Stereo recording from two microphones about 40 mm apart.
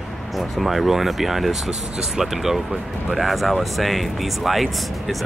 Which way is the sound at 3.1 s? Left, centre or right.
Centre.